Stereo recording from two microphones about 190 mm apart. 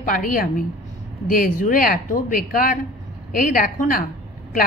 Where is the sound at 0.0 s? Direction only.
45° left (ahead or behind).